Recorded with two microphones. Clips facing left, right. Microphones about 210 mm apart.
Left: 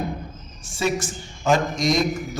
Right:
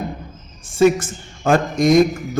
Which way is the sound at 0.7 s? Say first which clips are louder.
Right 10 dB; 55° right (ahead or behind).